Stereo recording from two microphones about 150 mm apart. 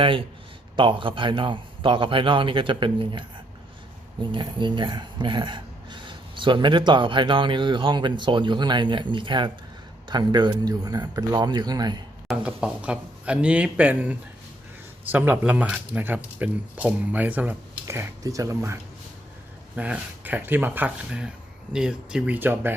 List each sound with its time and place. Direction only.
0.0 s speech: 35° right (ahead or behind)
12.3 s speech: 5° right (ahead or behind); by 18.8 s 20° right (ahead or behind)
19.7 s speech: 10° right (ahead or behind)